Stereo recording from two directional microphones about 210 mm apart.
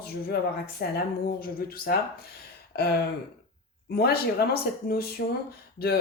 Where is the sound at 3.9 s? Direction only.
50° left (ahead or behind).